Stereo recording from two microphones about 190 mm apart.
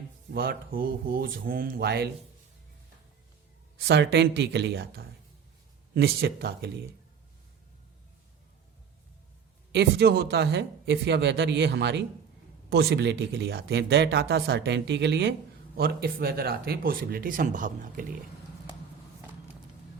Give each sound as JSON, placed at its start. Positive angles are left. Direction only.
{"t": 0.3, "sound": "speech", "side_deg": -50}
{"t": 3.8, "sound": "speech", "side_deg": -60}
{"t": 9.7, "sound": "speech", "side_deg": -60}
{"t": 15.8, "sound": "speech", "side_deg": -55}